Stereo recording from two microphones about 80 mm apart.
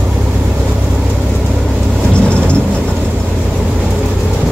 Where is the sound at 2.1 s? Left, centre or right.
Centre.